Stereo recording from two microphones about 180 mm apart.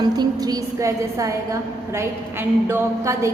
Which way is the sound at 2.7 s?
15° right (ahead or behind).